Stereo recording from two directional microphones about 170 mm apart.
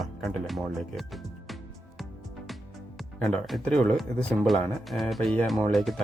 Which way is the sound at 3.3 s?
Centre (ahead or behind).